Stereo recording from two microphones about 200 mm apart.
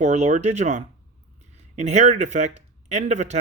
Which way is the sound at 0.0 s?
35° right (ahead or behind).